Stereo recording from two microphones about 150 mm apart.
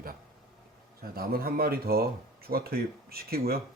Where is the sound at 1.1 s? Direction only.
85° right.